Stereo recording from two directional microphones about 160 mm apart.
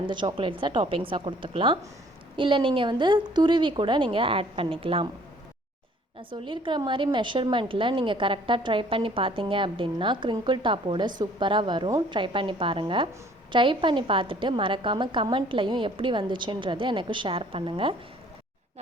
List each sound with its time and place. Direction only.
0.0 s a woman's voice: 30° right (ahead or behind)
6.3 s a woman's voice: 30° right (ahead or behind)